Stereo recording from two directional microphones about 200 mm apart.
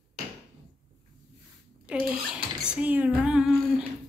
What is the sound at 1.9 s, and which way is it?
A woman's voice, 5° right (ahead or behind).